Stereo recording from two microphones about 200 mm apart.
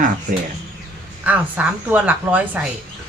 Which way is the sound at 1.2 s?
10° right (ahead or behind).